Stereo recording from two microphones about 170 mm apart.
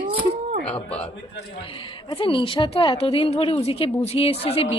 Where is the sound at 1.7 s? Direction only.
30° left (ahead or behind).